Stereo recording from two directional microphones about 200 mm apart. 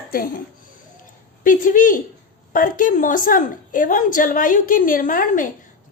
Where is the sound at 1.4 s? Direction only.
40° left (ahead or behind).